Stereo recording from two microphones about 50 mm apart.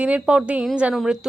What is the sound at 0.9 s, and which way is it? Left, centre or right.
Speech, centre.